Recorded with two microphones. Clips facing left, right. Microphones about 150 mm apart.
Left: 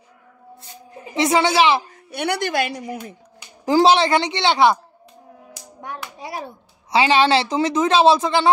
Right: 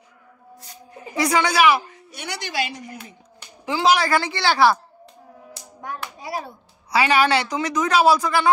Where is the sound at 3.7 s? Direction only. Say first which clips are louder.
Left 5 dB; 35° left (ahead or behind).